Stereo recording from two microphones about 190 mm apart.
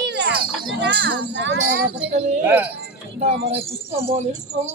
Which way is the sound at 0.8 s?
65° right (ahead or behind).